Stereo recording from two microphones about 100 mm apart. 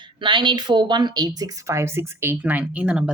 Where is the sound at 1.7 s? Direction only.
25° right (ahead or behind); by 3.1 s 10° right (ahead or behind).